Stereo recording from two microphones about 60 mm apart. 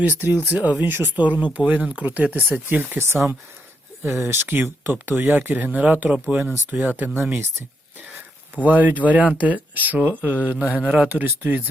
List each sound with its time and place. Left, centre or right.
0.0 s speech: right
3.0 s speech: right
8.6 s speech: right
10.8 s speech: centre
11.1 s speech: right